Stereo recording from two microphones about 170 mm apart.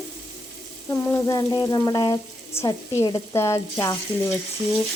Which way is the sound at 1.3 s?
20° left (ahead or behind).